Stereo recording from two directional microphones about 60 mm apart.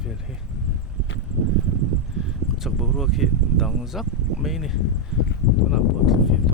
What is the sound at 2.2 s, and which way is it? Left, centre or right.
Speech, centre.